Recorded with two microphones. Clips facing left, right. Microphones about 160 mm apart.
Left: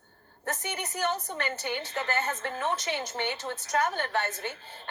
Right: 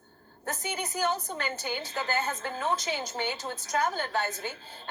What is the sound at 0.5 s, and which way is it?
A woman's voice, 70° left (ahead or behind).